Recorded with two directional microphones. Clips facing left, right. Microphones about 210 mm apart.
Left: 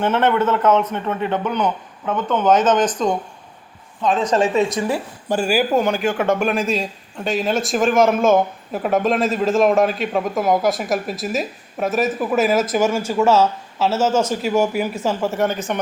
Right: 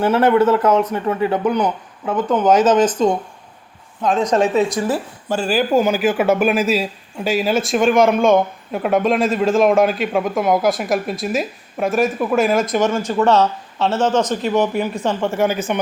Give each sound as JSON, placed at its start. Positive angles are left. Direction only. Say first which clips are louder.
{"t": 0.0, "sound": "speech", "louder": "right 4 dB", "side_deg": -35}
{"t": 3.0, "sound": "speech", "louder": "right 3 dB", "side_deg": 0}
{"t": 4.8, "sound": "speech", "louder": "right 1 dB", "side_deg": 15}
{"t": 5.7, "sound": "speech", "louder": "right 3 dB", "side_deg": -5}